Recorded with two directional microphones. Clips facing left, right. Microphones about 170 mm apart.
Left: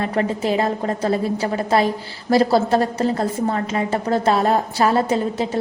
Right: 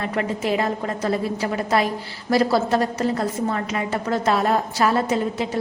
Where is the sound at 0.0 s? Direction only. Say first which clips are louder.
Left 3 dB; 30° left (ahead or behind).